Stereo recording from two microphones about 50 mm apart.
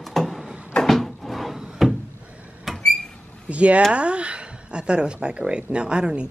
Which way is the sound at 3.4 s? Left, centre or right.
Right.